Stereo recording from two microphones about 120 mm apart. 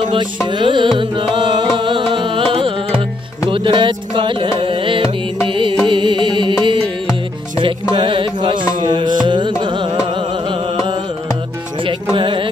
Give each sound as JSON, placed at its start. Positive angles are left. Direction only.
{"t": 0.5, "sound": "music", "side_deg": -40}
{"t": 7.9, "sound": "music", "side_deg": -45}
{"t": 9.6, "sound": "carnatic music", "side_deg": -40}
{"t": 11.8, "sound": "music", "side_deg": -45}